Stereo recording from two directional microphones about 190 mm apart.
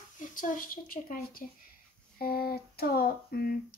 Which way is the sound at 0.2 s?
45° left (ahead or behind).